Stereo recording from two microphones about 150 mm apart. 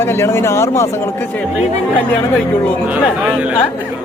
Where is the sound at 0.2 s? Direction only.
15° left (ahead or behind).